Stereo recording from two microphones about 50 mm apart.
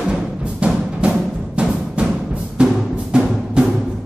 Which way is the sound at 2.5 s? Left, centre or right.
Centre.